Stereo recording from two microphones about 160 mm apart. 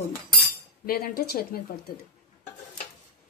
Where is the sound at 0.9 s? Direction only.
70° left (ahead or behind).